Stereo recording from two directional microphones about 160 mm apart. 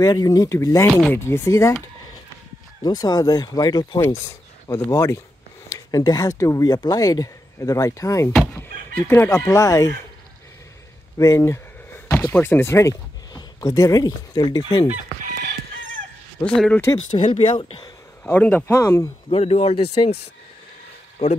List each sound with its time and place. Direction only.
0.0 s speech: 25° left (ahead or behind)
2.8 s speech: 25° left (ahead or behind)
11.1 s speech: 20° left (ahead or behind)
16.4 s speech: 5° left (ahead or behind)
17.2 s speech: 30° left (ahead or behind)
18.2 s speech: 10° left (ahead or behind)
19.2 s speech: 40° left (ahead or behind)